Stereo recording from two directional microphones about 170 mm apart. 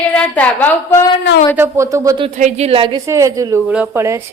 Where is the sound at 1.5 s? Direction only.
15° right (ahead or behind).